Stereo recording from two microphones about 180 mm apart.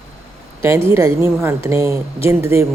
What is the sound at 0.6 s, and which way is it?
A woman's voice, 15° right (ahead or behind).